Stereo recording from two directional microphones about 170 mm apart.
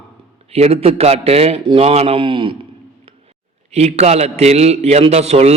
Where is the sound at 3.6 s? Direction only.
40° right (ahead or behind).